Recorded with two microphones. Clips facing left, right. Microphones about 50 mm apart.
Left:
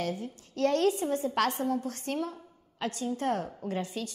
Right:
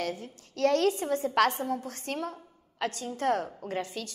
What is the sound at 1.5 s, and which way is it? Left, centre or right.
A woman's voice, right.